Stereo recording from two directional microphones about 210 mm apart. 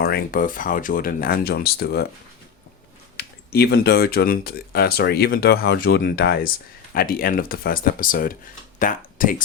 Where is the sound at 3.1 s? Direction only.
50° left (ahead or behind).